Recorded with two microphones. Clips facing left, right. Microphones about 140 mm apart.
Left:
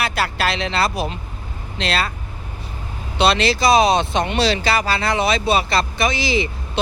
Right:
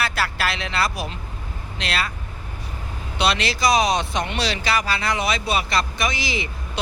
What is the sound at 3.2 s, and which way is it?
Speech, 30° left (ahead or behind).